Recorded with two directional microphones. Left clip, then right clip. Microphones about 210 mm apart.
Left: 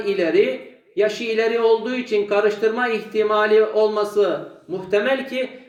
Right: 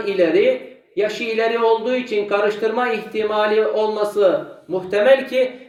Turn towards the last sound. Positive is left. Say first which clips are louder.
# right 6 dB
turn(degrees=-5)  # may be behind; listen again after turning